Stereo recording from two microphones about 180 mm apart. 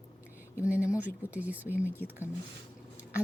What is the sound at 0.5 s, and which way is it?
A woman's voice, 10° right (ahead or behind).